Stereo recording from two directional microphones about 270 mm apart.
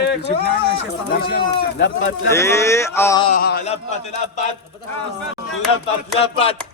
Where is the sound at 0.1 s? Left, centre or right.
Left.